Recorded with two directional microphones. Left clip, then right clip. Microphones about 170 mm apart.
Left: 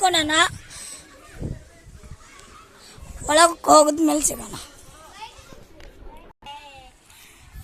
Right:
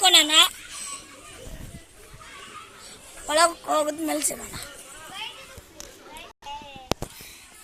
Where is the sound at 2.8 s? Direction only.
40° left (ahead or behind).